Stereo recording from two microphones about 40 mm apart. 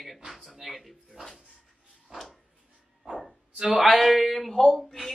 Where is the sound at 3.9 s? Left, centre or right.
Centre.